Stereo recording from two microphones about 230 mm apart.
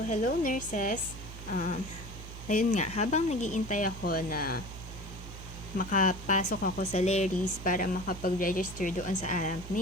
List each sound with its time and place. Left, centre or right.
0.1 s speech: left
5.7 s speech: left